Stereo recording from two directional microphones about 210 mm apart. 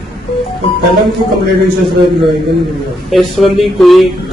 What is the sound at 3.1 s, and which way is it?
Speech, centre (ahead or behind).